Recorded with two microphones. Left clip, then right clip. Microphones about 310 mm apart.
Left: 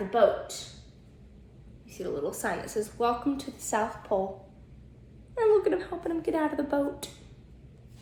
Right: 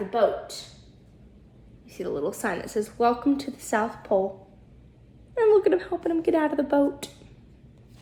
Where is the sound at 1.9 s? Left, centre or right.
Right.